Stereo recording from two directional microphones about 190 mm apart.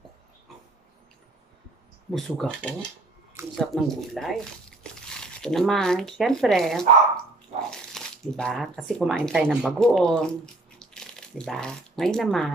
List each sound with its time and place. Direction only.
2.0 s speech: centre (ahead or behind)